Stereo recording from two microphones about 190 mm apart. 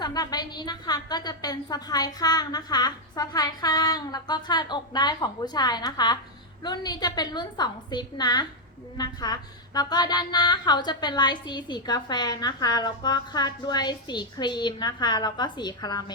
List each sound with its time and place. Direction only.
0.0 s a woman's voice: 20° left (ahead or behind)